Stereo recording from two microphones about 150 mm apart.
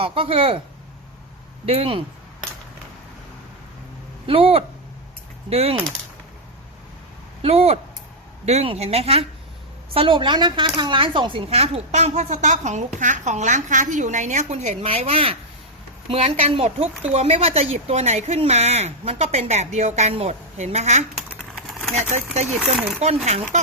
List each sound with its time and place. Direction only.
0.0 s speech: 35° right (ahead or behind)
1.6 s speech: 40° right (ahead or behind)
4.3 s speech: 40° right (ahead or behind)
7.4 s speech: 40° right (ahead or behind)
21.2 s typing: 5° right (ahead or behind)
21.9 s speech: 50° right (ahead or behind)